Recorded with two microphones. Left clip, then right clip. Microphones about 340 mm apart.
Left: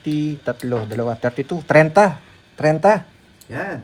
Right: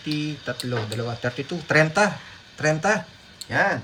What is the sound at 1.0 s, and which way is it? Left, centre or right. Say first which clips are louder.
Speech: left 6 dB; centre.